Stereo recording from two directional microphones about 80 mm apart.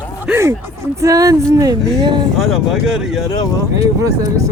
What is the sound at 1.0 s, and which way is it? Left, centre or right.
Speech, right.